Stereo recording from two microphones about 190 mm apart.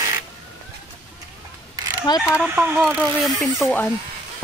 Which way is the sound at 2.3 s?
5° right (ahead or behind).